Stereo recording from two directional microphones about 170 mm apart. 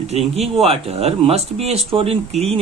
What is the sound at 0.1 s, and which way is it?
Speech, 35° right (ahead or behind).